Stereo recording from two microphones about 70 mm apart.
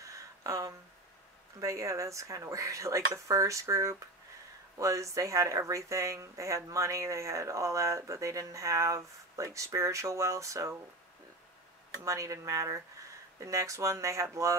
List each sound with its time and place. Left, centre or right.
0.0 s a sound: right
1.6 s speech: right
12.0 s speech: right